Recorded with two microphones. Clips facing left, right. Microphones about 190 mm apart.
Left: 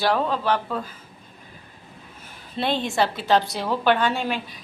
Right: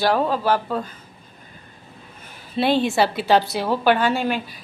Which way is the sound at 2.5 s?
5° right (ahead or behind).